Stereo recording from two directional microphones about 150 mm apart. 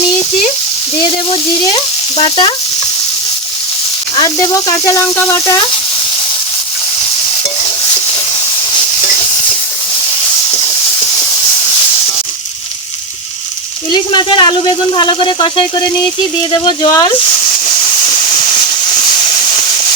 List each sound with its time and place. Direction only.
0.9 s speech: 35° left (ahead or behind)
4.1 s speech: 30° left (ahead or behind)
13.9 s speech: 30° left (ahead or behind)